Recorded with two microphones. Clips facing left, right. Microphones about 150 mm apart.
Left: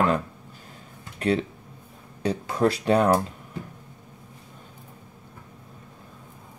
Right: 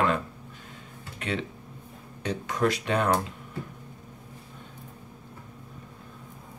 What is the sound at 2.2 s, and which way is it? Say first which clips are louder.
Speech: left 4 dB; 30° left (ahead or behind).